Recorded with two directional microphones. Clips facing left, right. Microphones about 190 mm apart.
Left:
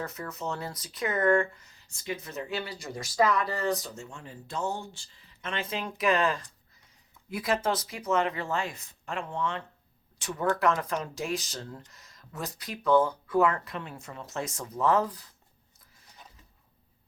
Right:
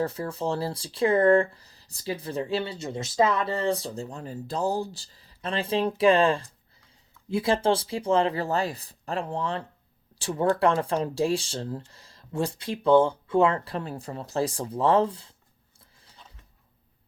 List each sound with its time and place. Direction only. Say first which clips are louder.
0.0 s speech: right 7 dB; 30° right (ahead or behind)